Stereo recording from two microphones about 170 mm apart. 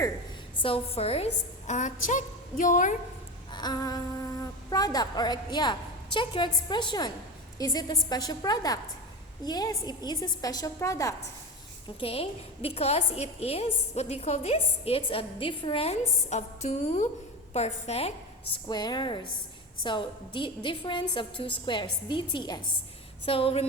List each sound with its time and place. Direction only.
0.6 s a woman's voice: 35° left (ahead or behind)
3.5 s a woman's voice: 25° left (ahead or behind)
11.9 s a woman's voice: 35° left (ahead or behind)
18.5 s a woman's voice: 25° left (ahead or behind)